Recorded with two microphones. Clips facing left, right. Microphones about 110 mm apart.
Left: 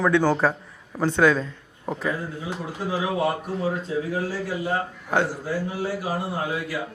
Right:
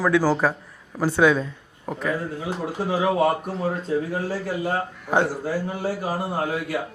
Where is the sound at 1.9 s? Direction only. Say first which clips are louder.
Left 1 dB; centre (ahead or behind).